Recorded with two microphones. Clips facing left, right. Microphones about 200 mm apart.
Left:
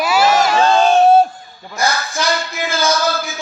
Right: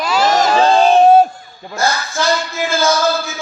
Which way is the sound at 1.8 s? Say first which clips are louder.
Right 1 dB; 15° left (ahead or behind).